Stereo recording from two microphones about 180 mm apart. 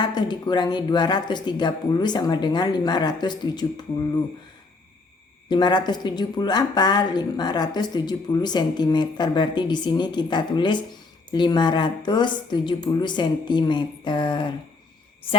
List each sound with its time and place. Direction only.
0.0 s a woman's voice: 25° left (ahead or behind)
5.5 s a woman's voice: 25° left (ahead or behind)